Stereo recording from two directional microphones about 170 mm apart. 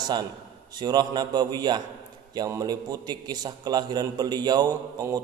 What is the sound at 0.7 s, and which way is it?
A man's voice, 25° right (ahead or behind).